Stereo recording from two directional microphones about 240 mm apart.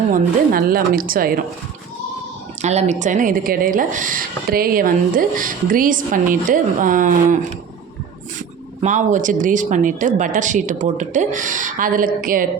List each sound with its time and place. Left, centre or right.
0.1 s speech: right
2.6 s speech: right
8.8 s speech: right